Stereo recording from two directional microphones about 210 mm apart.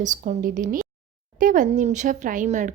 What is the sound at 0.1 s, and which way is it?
Speech, 40° right (ahead or behind).